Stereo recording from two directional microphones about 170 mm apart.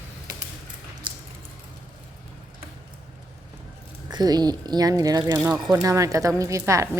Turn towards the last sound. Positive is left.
turn(degrees=-15)  # may be behind; listen again after turning